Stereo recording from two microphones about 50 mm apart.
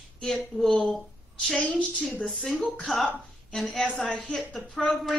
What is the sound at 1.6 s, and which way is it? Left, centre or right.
Speech, left.